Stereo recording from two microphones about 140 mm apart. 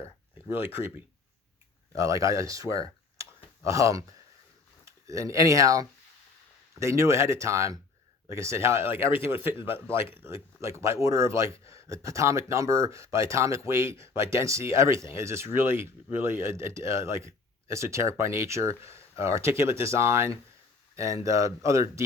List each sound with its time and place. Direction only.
0.5 s speech: 20° right (ahead or behind)
11.6 s speech: 40° left (ahead or behind)
11.9 s speech: 20° right (ahead or behind)